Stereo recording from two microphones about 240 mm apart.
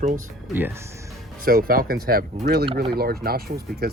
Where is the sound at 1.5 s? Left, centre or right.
Right.